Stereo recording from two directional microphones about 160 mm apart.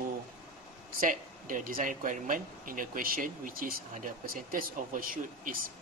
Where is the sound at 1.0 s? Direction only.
55° right (ahead or behind).